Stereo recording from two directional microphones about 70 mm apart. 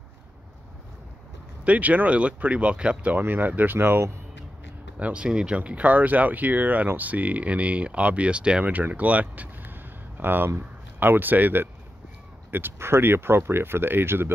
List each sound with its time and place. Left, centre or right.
1.6 s speech: right
3.2 s speech: right
4.9 s speech: centre; by 14.3 s right